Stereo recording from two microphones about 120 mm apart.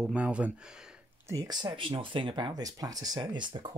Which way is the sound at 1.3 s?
25° right (ahead or behind).